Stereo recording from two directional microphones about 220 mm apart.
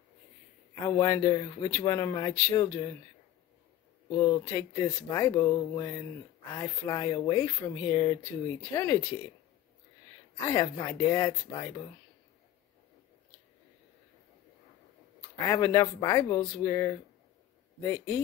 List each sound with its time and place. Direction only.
0.8 s speech: 15° left (ahead or behind)
4.1 s speech: 15° left (ahead or behind)
10.5 s speech: 15° left (ahead or behind)
15.4 s speech: 15° left (ahead or behind)